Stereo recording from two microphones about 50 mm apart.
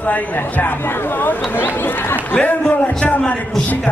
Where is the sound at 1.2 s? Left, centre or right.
Left.